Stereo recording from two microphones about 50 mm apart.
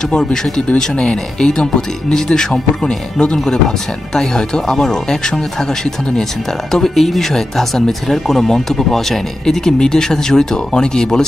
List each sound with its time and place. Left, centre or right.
0.1 s speech: centre
6.7 s speech: centre